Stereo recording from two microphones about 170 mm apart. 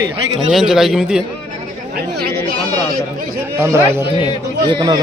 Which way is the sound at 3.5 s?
15° right (ahead or behind).